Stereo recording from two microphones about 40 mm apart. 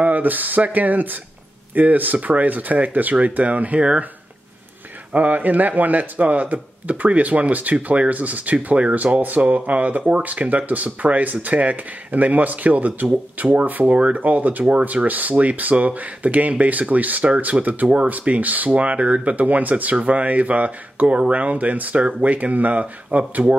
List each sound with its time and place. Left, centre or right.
0.0 s speech: right
5.1 s speech: right
8.6 s speech: right
8.9 s speech: right
13.7 s speech: right
13.9 s speech: right
14.2 s speech: right